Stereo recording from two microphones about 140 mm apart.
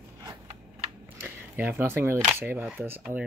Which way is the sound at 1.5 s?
15° right (ahead or behind).